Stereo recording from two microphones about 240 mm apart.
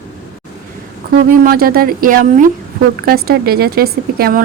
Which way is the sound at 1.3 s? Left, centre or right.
Right.